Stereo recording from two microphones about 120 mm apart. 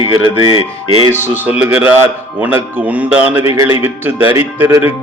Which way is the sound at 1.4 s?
10° right (ahead or behind).